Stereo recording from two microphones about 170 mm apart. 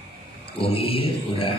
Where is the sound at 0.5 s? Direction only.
35° left (ahead or behind).